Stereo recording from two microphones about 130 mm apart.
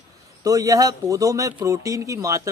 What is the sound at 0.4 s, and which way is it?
Speech, 25° right (ahead or behind).